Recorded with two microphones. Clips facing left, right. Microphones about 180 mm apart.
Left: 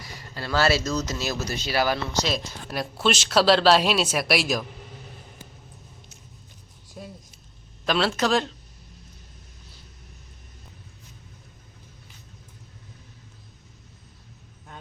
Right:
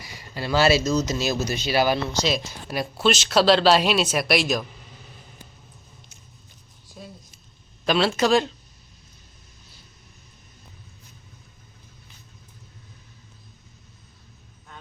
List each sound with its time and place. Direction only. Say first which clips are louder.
0.0 s speech: right 3 dB; 15° right (ahead or behind)
2.3 s speech: right 2 dB; centre (ahead or behind)
7.9 s speech: right 3 dB; centre (ahead or behind)